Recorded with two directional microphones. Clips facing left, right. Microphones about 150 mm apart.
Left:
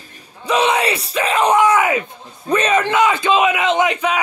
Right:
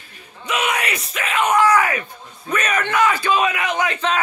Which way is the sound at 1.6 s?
20° left (ahead or behind).